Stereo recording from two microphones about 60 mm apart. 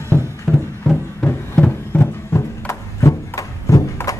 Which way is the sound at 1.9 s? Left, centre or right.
Left.